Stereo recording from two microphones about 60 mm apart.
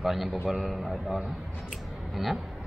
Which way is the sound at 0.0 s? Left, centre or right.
Centre.